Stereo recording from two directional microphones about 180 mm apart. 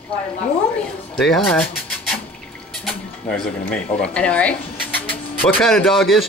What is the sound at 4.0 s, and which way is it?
Speech, 5° left (ahead or behind).